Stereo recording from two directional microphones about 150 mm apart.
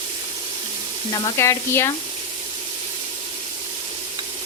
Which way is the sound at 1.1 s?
20° left (ahead or behind).